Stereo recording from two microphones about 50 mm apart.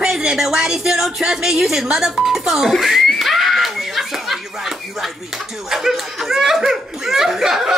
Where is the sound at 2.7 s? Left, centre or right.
Centre.